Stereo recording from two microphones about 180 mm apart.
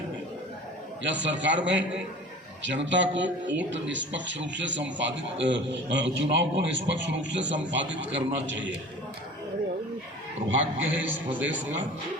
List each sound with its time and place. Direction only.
1.0 s a man's voice: 85° right
3.2 s speech: 10° right (ahead or behind)
3.7 s a man's voice: 90° right
10.8 s speech: 10° right (ahead or behind)